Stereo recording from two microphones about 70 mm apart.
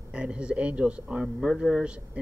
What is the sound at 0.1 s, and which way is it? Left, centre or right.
Speech, centre.